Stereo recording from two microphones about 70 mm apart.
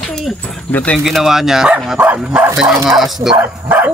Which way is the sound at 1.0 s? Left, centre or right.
Centre.